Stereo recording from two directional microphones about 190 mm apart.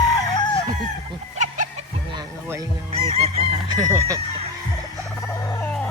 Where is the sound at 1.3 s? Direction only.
40° right (ahead or behind).